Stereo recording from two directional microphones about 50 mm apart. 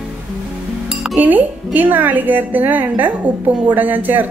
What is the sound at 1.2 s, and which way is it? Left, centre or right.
A woman's voice, right.